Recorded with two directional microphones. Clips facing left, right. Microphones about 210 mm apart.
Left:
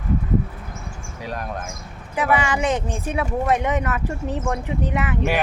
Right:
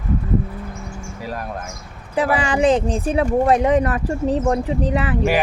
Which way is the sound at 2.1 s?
35° right (ahead or behind).